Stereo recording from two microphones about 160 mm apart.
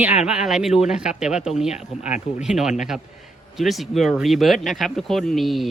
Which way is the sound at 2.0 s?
45° left (ahead or behind).